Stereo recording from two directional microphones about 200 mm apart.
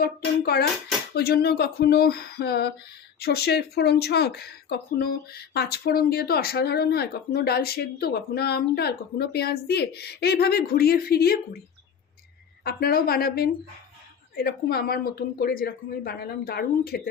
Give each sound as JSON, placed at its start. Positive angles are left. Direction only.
{"t": 0.0, "sound": "speech", "side_deg": 50}
{"t": 12.6, "sound": "speech", "side_deg": 50}